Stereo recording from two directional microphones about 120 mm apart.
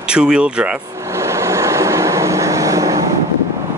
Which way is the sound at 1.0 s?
25° right (ahead or behind).